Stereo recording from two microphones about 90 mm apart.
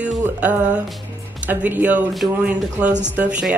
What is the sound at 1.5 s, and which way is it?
A woman's voice, 20° right (ahead or behind).